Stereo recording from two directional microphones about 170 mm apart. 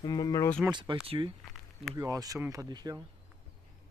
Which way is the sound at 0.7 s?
30° right (ahead or behind).